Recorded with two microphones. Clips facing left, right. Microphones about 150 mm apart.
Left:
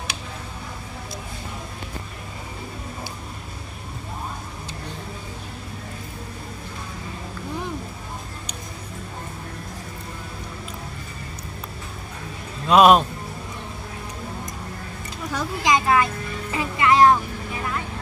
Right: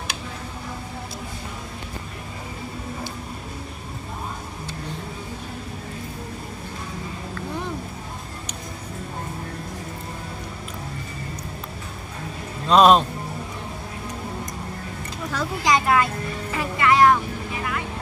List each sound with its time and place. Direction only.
12.6 s speech: 5° left (ahead or behind)
15.3 s a sound: 15° left (ahead or behind)
16.5 s music: 20° left (ahead or behind)